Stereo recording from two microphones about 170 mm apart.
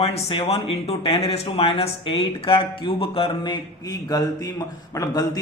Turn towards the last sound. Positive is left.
turn(degrees=20)  # may be behind; listen again after turning